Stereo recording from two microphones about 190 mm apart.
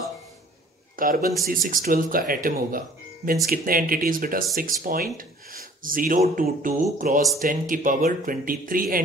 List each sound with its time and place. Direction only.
0.9 s a man's voice: 50° right (ahead or behind)